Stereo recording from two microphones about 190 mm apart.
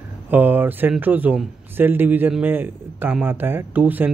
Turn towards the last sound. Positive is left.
turn(degrees=-10)  # may be behind; listen again after turning